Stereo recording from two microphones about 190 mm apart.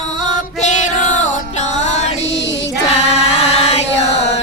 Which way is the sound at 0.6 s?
40° left (ahead or behind).